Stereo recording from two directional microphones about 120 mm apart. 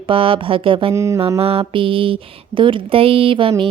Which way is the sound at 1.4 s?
50° right (ahead or behind).